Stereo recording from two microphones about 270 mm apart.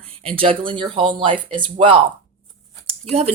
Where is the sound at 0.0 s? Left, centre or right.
Right.